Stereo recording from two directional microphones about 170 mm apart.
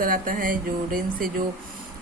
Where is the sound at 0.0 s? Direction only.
55° right (ahead or behind).